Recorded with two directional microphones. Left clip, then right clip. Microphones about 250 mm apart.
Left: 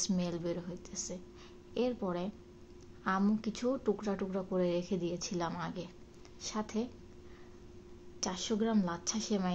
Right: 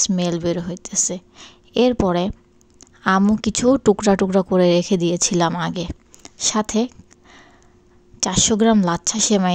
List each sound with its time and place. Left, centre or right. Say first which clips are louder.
0.0 s a woman's voice: right 16 dB; right
8.2 s a woman's voice: right 17 dB; right